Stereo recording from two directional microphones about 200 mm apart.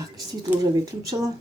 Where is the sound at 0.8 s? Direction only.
15° right (ahead or behind).